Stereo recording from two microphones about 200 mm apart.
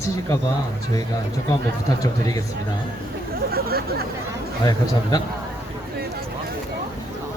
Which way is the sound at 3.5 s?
50° right (ahead or behind).